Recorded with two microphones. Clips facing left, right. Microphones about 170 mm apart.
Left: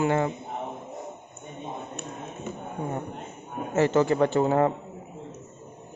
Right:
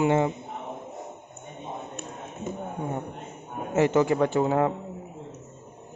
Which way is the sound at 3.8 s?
15° right (ahead or behind).